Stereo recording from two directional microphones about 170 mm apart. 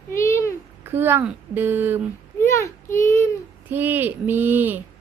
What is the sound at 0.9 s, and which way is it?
Mantra, 15° right (ahead or behind).